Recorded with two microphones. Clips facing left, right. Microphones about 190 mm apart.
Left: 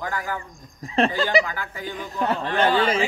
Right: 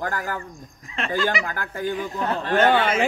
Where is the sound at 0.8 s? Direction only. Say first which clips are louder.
Left 10 dB; 35° left (ahead or behind).